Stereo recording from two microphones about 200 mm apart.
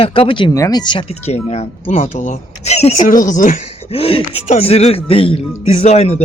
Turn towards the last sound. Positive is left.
turn(degrees=30)  # may be behind; listen again after turning